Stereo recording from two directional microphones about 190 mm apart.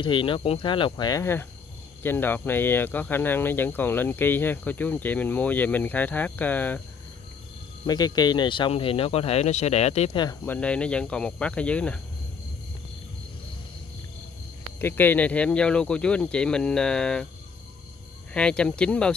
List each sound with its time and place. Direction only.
0.0 s speech: 25° left (ahead or behind); by 6.8 s 10° left (ahead or behind)
7.8 s speech: 20° left (ahead or behind)
10.4 s speech: 10° left (ahead or behind)
14.8 s speech: 10° left (ahead or behind)
18.3 s speech: 5° left (ahead or behind)